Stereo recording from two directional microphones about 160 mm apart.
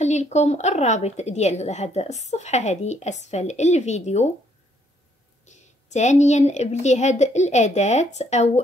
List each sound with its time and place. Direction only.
0.0 s speech: 45° left (ahead or behind)
5.4 s speech: 45° left (ahead or behind)